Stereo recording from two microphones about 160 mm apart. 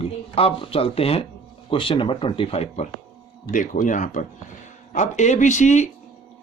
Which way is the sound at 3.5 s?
55° left (ahead or behind).